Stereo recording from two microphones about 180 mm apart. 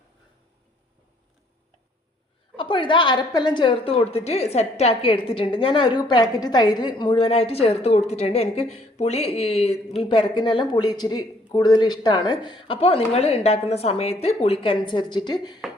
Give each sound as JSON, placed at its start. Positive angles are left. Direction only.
{"t": 2.6, "sound": "a woman's voice", "side_deg": 25}